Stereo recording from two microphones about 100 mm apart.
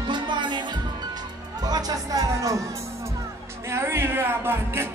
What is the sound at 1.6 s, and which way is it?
Music, 40° right (ahead or behind).